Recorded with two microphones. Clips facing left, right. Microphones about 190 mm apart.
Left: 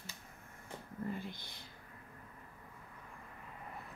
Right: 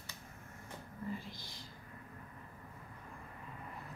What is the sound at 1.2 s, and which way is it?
Speech, 60° left (ahead or behind).